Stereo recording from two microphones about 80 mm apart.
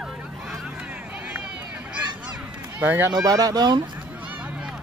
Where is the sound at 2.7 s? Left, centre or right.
Right.